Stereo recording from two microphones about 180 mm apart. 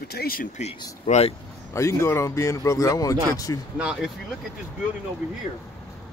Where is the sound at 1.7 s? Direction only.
15° left (ahead or behind).